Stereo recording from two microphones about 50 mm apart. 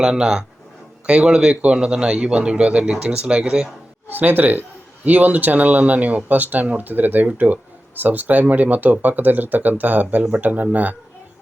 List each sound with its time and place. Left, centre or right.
0.0 s a man's voice: centre
4.1 s speech: right